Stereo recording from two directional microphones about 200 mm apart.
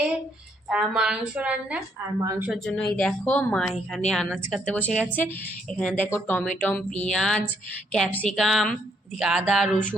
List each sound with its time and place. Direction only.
0.7 s a woman's voice: 5° right (ahead or behind)
2.2 s a woman's voice: 15° right (ahead or behind)
2.5 s a woman's voice: 5° left (ahead or behind)